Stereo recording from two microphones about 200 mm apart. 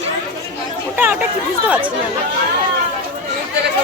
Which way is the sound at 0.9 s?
10° right (ahead or behind).